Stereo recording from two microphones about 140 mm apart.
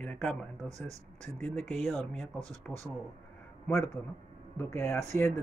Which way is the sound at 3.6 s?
20° left (ahead or behind).